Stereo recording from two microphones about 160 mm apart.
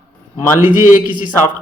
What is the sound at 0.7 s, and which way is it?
Speech, 55° left (ahead or behind).